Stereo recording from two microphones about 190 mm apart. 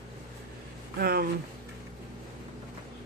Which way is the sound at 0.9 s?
55° right (ahead or behind).